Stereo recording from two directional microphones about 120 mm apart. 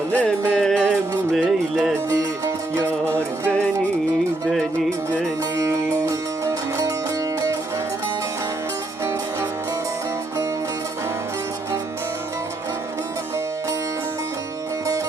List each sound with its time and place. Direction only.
0.1 s music: 10° left (ahead or behind)
1.3 s music: 5° right (ahead or behind)
2.0 s music: 20° right (ahead or behind)
6.1 s music: 25° right (ahead or behind)